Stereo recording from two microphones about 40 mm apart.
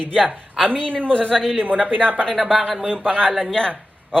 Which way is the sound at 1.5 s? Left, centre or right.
Right.